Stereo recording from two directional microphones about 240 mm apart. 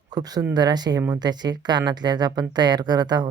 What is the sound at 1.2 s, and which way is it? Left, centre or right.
Speech, centre.